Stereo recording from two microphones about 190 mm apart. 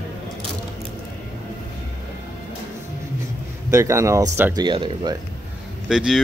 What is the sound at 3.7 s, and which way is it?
Speech, 15° right (ahead or behind).